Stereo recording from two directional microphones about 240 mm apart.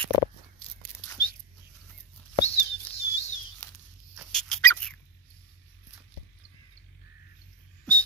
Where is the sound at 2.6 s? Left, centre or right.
Left.